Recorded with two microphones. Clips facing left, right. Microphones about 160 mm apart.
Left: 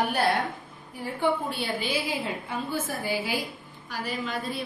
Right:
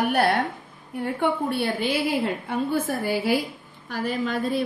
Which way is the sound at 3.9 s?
50° right (ahead or behind).